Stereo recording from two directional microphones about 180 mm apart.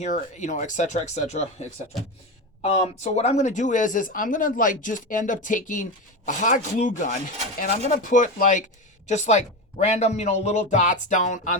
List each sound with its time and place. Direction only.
0.0 s speech: 40° left (ahead or behind)